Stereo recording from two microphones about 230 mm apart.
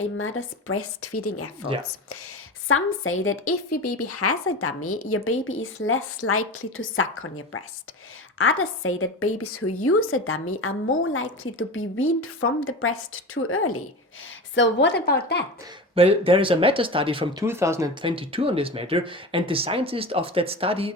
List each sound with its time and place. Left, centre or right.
0.2 s a woman's voice: left
2.6 s a woman's voice: left
3.9 s a woman's voice: left
14.5 s a woman's voice: left
16.0 s speech: right
17.4 s speech: centre